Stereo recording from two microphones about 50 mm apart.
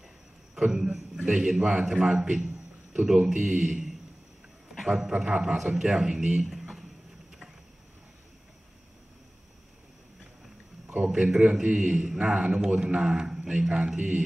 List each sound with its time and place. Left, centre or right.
0.6 s a man's voice: centre
2.3 s a sound: centre
3.1 s a man's voice: centre
11.1 s a man's voice: centre
13.9 s a man's voice: right